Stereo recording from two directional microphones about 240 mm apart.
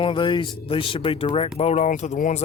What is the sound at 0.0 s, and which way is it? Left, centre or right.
Speech, left.